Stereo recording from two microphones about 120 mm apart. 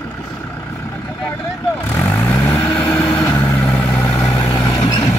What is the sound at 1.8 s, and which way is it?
Vehicle, 15° left (ahead or behind).